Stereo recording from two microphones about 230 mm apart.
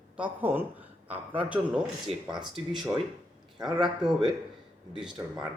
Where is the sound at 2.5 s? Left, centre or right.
Centre.